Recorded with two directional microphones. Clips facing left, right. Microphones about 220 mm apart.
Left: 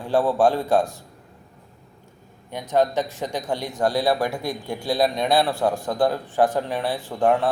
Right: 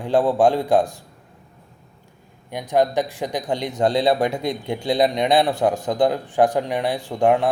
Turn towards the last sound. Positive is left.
turn(degrees=-15)  # may be behind; listen again after turning